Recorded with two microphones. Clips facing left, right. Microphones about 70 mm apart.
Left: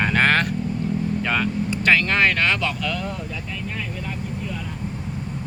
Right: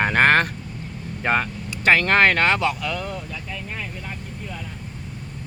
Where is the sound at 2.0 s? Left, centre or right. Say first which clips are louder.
Right 3 dB; right.